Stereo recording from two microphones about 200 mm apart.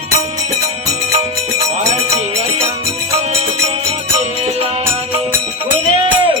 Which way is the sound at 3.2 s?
30° right (ahead or behind).